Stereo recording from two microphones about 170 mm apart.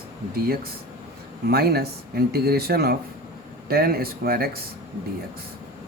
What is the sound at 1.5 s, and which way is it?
Speech, 65° right (ahead or behind).